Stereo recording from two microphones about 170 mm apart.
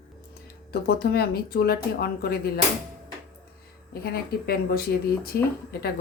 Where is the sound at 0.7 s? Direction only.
65° left (ahead or behind).